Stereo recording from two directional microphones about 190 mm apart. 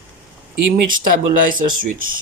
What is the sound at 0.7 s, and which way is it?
Speech, 45° right (ahead or behind).